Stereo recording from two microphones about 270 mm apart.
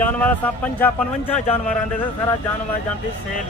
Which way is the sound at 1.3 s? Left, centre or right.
Left.